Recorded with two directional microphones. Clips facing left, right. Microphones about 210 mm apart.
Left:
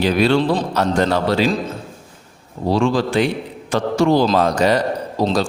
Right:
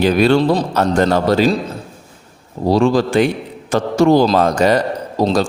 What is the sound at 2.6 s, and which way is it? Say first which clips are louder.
A man's voice: right 4 dB; 40° right (ahead or behind).